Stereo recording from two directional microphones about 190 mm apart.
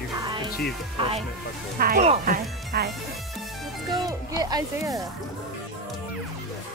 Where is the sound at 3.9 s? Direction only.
20° right (ahead or behind).